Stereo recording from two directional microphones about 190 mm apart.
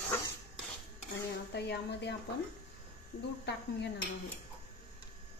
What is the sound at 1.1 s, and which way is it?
Speech, 65° left (ahead or behind).